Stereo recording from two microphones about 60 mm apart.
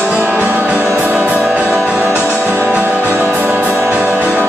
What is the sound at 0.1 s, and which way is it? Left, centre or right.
Music, right.